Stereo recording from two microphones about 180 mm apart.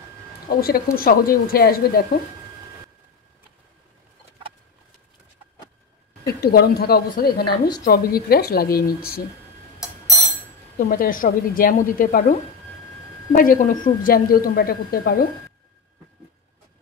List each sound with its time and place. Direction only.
0.5 s speech: 55° left (ahead or behind)
6.2 s speech: 60° left (ahead or behind)
9.8 s bell: 20° left (ahead or behind)
10.9 s a woman's voice: 50° left (ahead or behind)
13.4 s a woman's voice: 50° left (ahead or behind)